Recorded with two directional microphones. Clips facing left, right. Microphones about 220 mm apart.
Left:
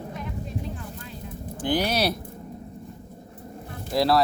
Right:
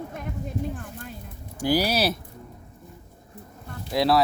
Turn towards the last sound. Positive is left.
turn(degrees=0)  # may be behind; listen again after turning